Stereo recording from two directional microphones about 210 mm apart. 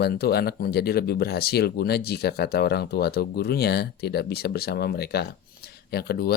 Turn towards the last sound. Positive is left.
turn(degrees=50)  # may be behind; listen again after turning